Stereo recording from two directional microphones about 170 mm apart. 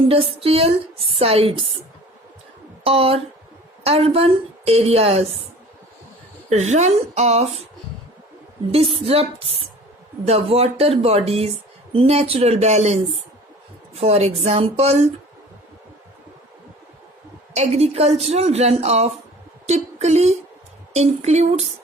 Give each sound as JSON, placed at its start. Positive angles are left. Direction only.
{"t": 0.1, "sound": "speech", "side_deg": -35}
{"t": 2.8, "sound": "speech", "side_deg": -35}
{"t": 6.5, "sound": "speech", "side_deg": -40}
{"t": 8.7, "sound": "speech", "side_deg": -35}
{"t": 14.0, "sound": "speech", "side_deg": -40}
{"t": 17.5, "sound": "speech", "side_deg": -40}
{"t": 19.6, "sound": "music", "side_deg": -40}
{"t": 20.9, "sound": "speech", "side_deg": -40}